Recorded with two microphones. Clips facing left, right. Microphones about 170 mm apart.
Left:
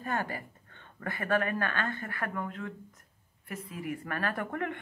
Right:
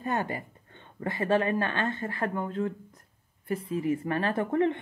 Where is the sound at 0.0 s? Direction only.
25° right (ahead or behind).